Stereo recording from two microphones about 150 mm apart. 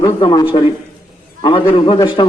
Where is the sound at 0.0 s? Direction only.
30° left (ahead or behind).